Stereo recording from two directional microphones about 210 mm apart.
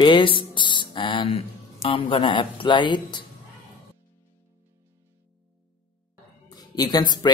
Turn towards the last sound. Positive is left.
turn(degrees=20)  # may be behind; listen again after turning